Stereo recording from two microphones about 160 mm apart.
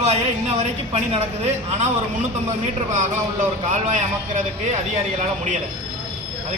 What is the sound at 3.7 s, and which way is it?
Speech, 50° right (ahead or behind).